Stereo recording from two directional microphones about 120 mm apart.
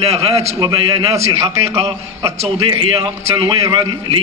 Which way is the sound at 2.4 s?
55° right (ahead or behind).